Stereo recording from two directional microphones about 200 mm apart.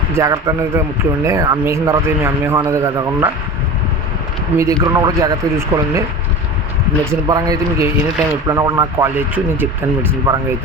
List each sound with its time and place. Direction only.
0.1 s speech: 15° right (ahead or behind)
4.5 s speech: 15° right (ahead or behind)
7.1 s speech: 20° right (ahead or behind)